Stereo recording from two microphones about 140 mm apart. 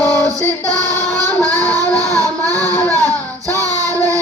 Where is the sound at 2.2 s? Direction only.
25° right (ahead or behind).